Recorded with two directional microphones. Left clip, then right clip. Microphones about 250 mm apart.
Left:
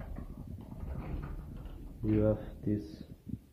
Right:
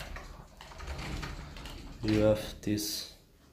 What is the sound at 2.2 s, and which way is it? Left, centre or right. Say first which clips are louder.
Speech: right 5 dB; centre.